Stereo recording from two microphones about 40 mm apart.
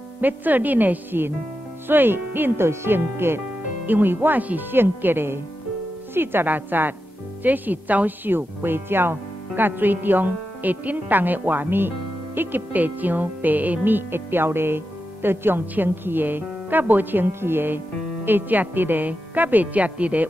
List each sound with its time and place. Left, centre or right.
0.2 s speech: right
3.8 s speech: right
4.4 s speech: right
4.6 s speech: right
6.4 s speech: right
8.3 s speech: right
9.1 s speech: right
15.7 s speech: right
17.3 s speech: right